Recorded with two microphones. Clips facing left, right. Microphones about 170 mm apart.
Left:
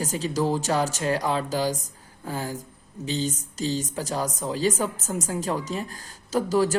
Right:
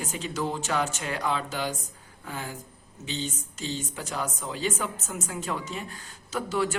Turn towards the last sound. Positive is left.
turn(degrees=40)  # may be behind; listen again after turning